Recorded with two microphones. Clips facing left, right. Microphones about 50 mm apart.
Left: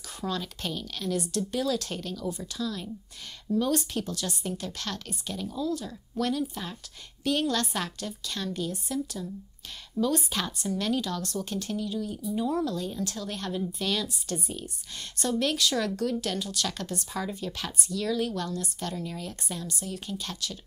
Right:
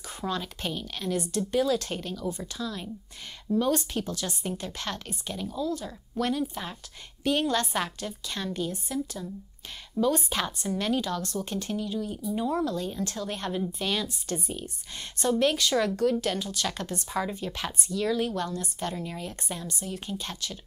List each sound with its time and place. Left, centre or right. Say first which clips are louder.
0.2 s speech: right 1 dB; centre
3.7 s speech: even; centre
4.5 s speech: right 2 dB; centre